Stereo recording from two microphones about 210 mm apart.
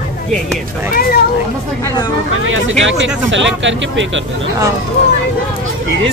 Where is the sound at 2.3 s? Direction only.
70° right (ahead or behind).